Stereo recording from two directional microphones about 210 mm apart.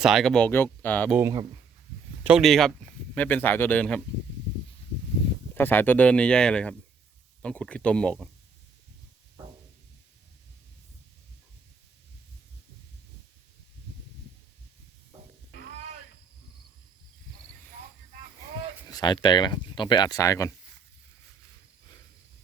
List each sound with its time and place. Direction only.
0.0 s speech: centre (ahead or behind)
1.1 s speech: 15° right (ahead or behind)
2.2 s speech: 5° right (ahead or behind)
5.5 s speech: 10° left (ahead or behind)
18.9 s speech: 20° left (ahead or behind)